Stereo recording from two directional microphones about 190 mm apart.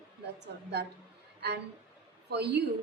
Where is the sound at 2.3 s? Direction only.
60° right (ahead or behind).